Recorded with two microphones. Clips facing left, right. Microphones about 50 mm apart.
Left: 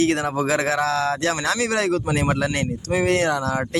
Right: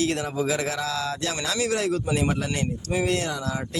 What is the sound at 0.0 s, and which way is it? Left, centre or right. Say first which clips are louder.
Speech: left 5 dB; left.